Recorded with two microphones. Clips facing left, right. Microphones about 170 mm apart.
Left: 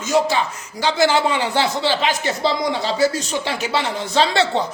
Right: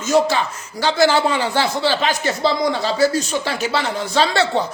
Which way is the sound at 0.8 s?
15° left (ahead or behind).